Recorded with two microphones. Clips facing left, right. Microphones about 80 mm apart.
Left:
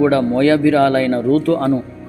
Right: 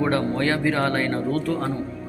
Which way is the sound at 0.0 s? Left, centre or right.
Left.